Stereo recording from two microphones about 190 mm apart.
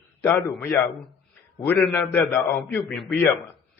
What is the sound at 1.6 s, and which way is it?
A man's voice, 5° left (ahead or behind).